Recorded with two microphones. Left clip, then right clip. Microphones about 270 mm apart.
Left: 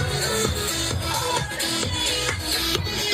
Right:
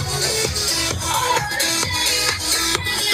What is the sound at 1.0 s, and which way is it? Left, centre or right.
Music, right.